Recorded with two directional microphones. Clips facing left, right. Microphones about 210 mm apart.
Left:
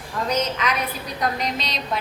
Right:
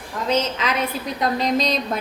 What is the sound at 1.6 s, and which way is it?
Speech, 45° right (ahead or behind).